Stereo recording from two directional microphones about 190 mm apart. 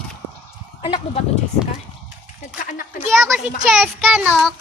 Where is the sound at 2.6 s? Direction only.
45° left (ahead or behind).